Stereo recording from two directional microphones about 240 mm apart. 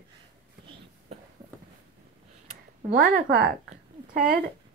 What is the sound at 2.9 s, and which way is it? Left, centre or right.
Speech, right.